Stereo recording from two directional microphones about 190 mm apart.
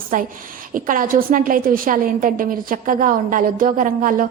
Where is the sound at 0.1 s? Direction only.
45° right (ahead or behind).